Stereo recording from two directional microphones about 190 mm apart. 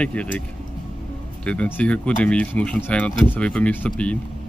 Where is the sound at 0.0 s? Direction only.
5° left (ahead or behind).